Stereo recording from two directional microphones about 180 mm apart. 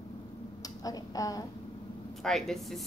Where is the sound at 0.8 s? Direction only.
20° left (ahead or behind).